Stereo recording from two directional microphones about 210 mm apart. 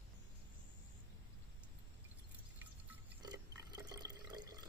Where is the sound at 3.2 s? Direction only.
20° right (ahead or behind).